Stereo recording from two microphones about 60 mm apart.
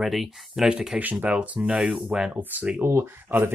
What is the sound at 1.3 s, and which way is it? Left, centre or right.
Speech, centre.